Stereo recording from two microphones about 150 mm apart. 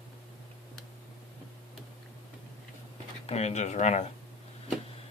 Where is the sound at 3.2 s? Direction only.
45° left (ahead or behind).